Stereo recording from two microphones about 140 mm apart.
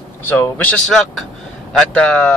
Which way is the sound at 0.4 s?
10° left (ahead or behind).